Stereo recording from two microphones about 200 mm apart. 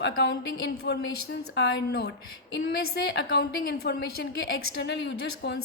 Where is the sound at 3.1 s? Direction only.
50° left (ahead or behind).